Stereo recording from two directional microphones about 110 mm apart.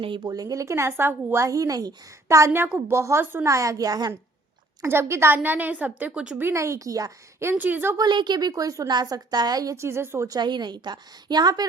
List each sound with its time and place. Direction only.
0.3 s a woman's voice: 35° right (ahead or behind)
4.8 s a woman's voice: 25° right (ahead or behind)
6.4 s a woman's voice: 25° right (ahead or behind)
7.5 s a woman's voice: 15° right (ahead or behind)
7.9 s a woman's voice: 40° right (ahead or behind); by 10.2 s 25° right (ahead or behind)
10.2 s a woman's voice: 40° right (ahead or behind)